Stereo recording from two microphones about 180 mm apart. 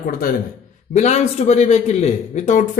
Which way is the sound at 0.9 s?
40° left (ahead or behind).